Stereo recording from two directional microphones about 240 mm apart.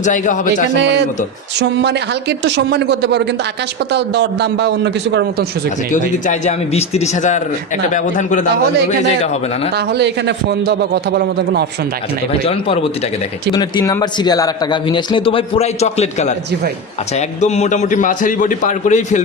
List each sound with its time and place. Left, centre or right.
0.0 s a man's voice: left
0.7 s a man's voice: right
5.9 s a man's voice: left
9.9 s a man's voice: right
12.4 s a man's voice: left
17.4 s a man's voice: left